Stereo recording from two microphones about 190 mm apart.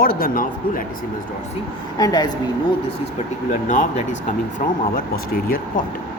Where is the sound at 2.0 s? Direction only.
20° left (ahead or behind).